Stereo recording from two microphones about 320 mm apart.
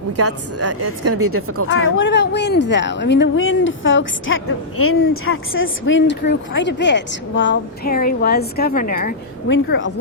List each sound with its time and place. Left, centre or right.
0.2 s a woman's voice: right
1.6 s speech: left